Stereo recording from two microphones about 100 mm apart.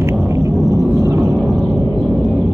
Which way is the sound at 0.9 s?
35° right (ahead or behind).